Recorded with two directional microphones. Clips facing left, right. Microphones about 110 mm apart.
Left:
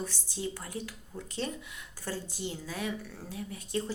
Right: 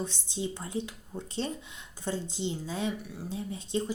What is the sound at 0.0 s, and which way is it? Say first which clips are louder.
Speech: right 2 dB; 20° right (ahead or behind).